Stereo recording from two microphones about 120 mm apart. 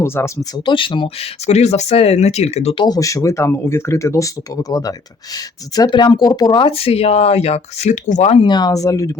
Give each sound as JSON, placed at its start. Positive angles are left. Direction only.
{"t": 0.0, "sound": "speech", "side_deg": 20}
{"t": 0.6, "sound": "speech", "side_deg": 45}
{"t": 2.7, "sound": "speech", "side_deg": 35}
{"t": 8.4, "sound": "speech", "side_deg": 35}